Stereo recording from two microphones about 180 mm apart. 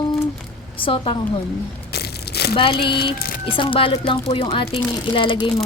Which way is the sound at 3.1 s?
55° left (ahead or behind).